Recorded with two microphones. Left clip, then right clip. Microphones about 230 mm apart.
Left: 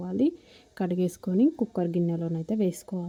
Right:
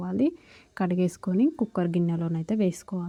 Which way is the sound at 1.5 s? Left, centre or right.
Right.